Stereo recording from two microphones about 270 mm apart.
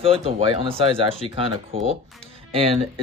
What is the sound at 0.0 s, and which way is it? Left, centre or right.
Speech, right.